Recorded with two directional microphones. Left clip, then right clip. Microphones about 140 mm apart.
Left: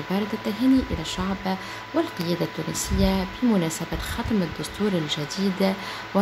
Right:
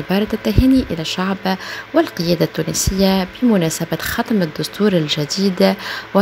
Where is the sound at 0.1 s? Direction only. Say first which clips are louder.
Right 10 dB; 50° right (ahead or behind).